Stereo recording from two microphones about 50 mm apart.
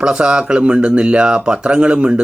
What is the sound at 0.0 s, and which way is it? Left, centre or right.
Speech, centre.